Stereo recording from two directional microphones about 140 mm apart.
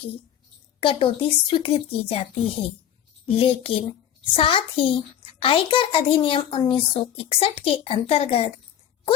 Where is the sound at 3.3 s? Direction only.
45° left (ahead or behind).